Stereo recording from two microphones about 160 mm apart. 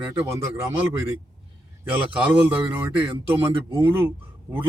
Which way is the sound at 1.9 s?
10° right (ahead or behind).